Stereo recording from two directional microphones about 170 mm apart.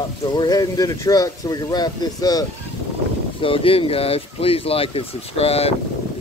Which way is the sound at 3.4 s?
30° left (ahead or behind).